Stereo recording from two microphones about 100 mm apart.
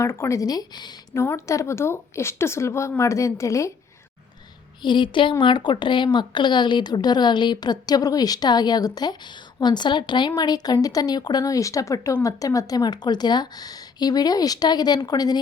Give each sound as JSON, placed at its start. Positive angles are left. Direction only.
{"t": 0.0, "sound": "a woman's voice", "side_deg": 30}
{"t": 1.1, "sound": "a woman's voice", "side_deg": 30}
{"t": 4.8, "sound": "a woman's voice", "side_deg": 50}